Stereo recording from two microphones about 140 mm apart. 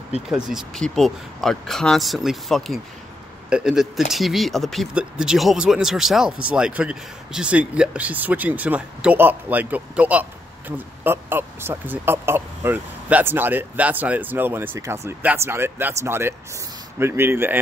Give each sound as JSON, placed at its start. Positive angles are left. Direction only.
{"t": 0.3, "sound": "speech", "side_deg": -5}